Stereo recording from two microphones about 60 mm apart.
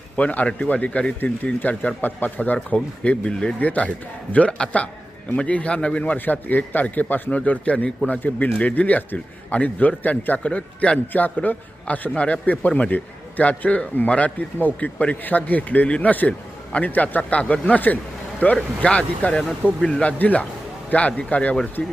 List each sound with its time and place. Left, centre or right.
0.2 s a man's voice: left